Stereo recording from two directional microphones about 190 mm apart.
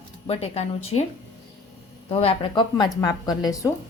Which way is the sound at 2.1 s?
30° left (ahead or behind).